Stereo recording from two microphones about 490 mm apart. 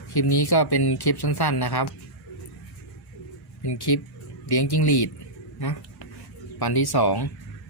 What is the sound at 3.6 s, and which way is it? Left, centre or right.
Speech, left.